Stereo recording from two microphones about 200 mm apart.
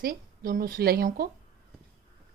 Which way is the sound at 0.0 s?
45° right (ahead or behind).